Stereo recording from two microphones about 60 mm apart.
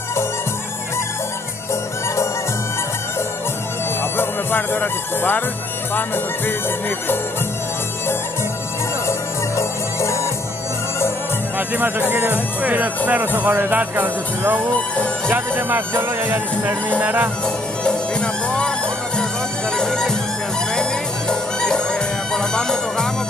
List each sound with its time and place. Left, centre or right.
4.2 s speech: left
5.9 s music: left
9.6 s music: left
11.5 s music: right
12.1 s speech: right
17.8 s music: centre
19.8 s music: centre
21.3 s music: centre